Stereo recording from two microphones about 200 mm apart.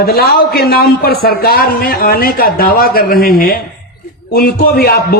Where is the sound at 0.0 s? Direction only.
50° left (ahead or behind).